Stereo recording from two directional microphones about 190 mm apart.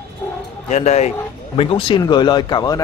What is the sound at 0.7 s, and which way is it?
Speech, 35° left (ahead or behind).